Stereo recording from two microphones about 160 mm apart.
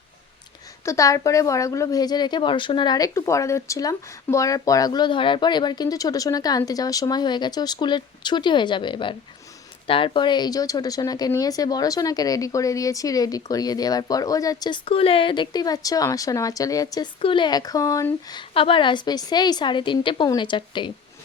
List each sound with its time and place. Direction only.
0.9 s speech: 20° left (ahead or behind)
17.2 s speech: 30° left (ahead or behind)